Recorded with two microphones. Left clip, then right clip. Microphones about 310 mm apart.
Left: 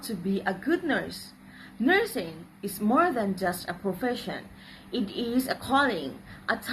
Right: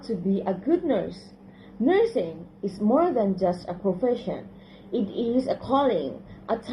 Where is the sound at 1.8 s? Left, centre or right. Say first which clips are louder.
Right 3 dB; left.